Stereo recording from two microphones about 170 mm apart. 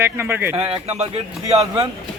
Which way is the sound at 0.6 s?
35° right (ahead or behind).